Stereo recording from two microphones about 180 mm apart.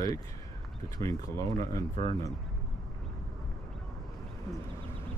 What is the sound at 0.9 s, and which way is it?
Speech, 20° left (ahead or behind).